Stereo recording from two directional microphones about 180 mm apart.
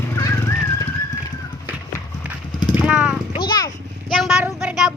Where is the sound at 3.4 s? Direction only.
25° left (ahead or behind).